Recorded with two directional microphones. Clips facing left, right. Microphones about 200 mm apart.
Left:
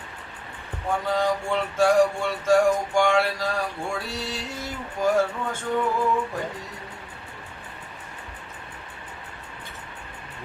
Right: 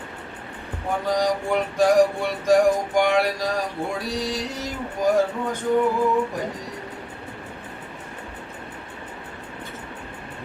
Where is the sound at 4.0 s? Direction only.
15° right (ahead or behind).